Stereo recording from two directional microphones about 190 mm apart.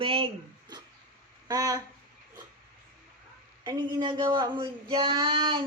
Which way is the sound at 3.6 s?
25° right (ahead or behind).